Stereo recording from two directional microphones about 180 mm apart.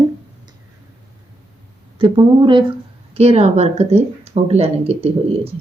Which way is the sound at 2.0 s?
25° right (ahead or behind).